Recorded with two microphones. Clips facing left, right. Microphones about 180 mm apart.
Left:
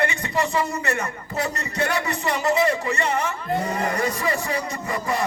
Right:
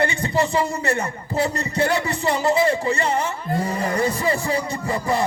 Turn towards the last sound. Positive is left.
turn(degrees=-30)  # may be behind; listen again after turning